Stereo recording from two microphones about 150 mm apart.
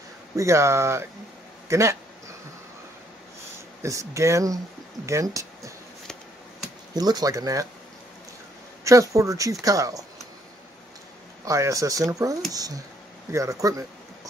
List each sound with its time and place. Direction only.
0.4 s speech: 20° right (ahead or behind)
1.7 s a sound: 20° right (ahead or behind)
3.8 s speech: 20° right (ahead or behind)
6.9 s speech: 25° right (ahead or behind)
8.8 s speech: 20° right (ahead or behind)
11.4 s speech: 20° right (ahead or behind)